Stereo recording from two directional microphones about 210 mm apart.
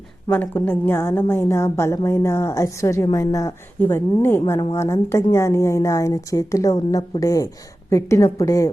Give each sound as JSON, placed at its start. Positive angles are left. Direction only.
{"t": 0.3, "sound": "a woman's voice", "side_deg": 10}